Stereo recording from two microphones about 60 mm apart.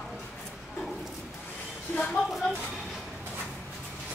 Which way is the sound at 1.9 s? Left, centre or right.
Left.